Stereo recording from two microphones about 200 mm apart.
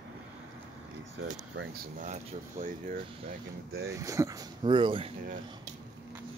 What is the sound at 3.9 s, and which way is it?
Speech, 15° right (ahead or behind).